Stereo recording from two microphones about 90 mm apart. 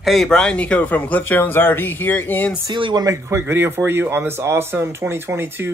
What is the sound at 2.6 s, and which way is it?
Speech, 60° right (ahead or behind).